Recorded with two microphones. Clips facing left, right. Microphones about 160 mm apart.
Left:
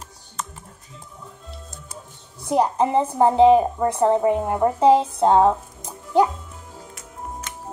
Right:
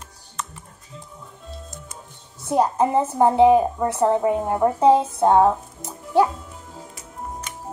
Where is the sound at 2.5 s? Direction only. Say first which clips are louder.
Even; 15° left (ahead or behind).